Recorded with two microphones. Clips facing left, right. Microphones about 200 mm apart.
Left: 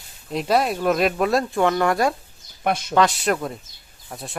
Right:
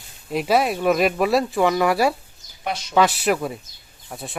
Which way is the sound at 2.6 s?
50° left (ahead or behind).